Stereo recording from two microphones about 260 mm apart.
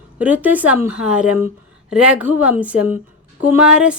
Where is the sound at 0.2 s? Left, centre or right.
Centre.